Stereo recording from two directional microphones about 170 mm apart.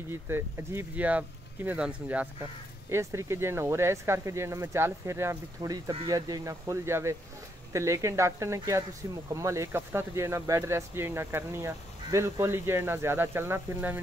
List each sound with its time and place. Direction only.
0.1 s speech: 15° right (ahead or behind)